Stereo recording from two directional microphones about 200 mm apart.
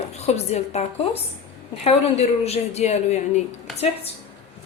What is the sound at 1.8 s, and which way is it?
Speech, 30° left (ahead or behind).